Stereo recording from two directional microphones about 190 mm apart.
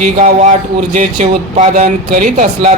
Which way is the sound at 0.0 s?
40° right (ahead or behind).